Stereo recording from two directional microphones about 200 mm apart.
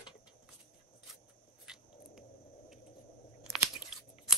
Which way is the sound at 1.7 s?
5° right (ahead or behind).